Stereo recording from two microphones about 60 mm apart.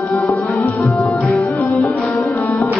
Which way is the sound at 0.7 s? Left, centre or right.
Left.